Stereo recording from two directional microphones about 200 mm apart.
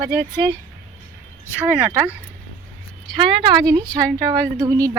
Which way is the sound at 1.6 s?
5° right (ahead or behind).